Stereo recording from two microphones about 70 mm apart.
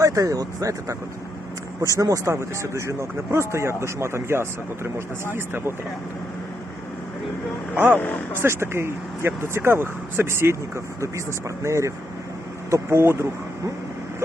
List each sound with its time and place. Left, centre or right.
0.0 s speech: right
7.9 s speech: left
8.3 s speech: right